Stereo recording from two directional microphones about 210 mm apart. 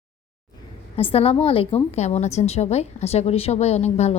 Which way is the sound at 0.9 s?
25° left (ahead or behind).